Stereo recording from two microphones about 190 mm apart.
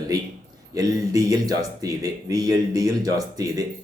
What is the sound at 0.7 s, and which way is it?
Speech, 20° right (ahead or behind).